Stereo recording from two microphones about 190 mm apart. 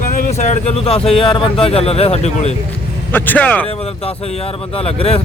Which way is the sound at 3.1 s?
10° left (ahead or behind).